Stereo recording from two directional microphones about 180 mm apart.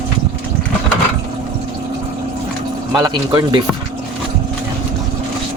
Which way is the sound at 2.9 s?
20° right (ahead or behind).